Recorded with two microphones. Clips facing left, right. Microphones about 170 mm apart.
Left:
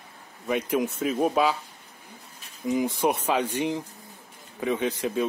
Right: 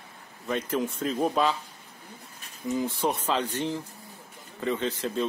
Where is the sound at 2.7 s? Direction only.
15° left (ahead or behind).